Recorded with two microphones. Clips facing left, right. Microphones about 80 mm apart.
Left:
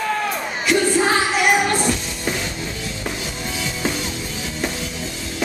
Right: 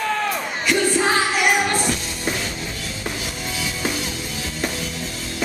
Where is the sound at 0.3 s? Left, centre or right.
Centre.